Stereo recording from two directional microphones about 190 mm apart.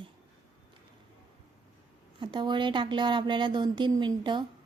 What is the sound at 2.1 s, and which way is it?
A woman's voice, 25° right (ahead or behind).